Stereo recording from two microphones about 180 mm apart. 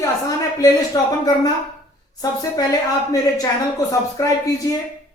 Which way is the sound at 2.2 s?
20° left (ahead or behind).